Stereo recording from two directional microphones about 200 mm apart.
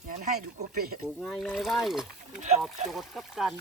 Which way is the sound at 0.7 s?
50° right (ahead or behind).